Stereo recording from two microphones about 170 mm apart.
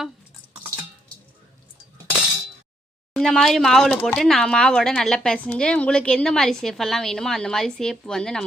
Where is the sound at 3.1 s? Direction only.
Centre (ahead or behind).